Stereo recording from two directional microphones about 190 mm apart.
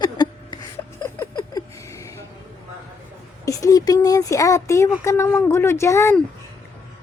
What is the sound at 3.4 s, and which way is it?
Speech, 15° left (ahead or behind).